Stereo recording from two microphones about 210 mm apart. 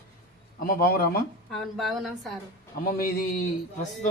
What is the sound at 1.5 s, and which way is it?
Speech, centre (ahead or behind).